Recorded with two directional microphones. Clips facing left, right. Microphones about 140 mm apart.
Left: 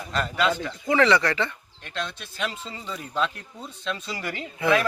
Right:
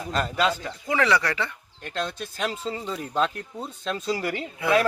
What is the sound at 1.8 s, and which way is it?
Speech, 45° right (ahead or behind).